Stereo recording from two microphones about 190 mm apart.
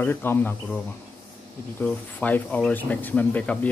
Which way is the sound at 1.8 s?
10° left (ahead or behind).